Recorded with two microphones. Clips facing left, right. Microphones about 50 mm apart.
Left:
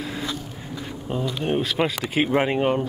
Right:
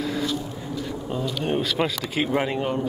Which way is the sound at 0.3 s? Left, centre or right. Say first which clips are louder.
Right 3 dB; left.